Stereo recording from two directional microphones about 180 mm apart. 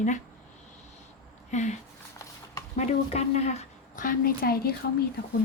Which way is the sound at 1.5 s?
40° left (ahead or behind).